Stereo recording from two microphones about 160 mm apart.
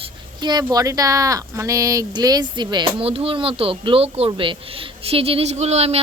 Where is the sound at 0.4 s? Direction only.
25° right (ahead or behind).